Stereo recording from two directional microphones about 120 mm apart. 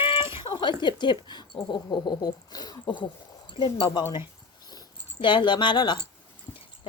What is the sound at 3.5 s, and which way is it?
Speech, 45° left (ahead or behind).